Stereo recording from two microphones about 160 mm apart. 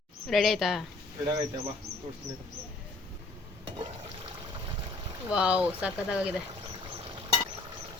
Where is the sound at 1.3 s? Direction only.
30° right (ahead or behind).